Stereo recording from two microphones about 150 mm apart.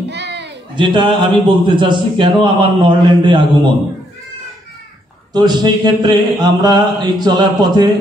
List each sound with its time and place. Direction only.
0.7 s a man's voice: 30° right (ahead or behind)
5.3 s a man's voice: 30° right (ahead or behind)